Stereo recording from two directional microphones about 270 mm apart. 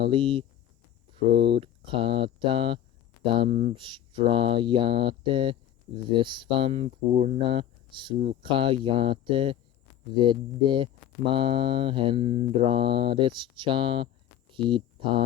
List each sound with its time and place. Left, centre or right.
0.0 s mantra: centre
1.1 s speech: centre
1.5 s mantra: centre
14.5 s speech: centre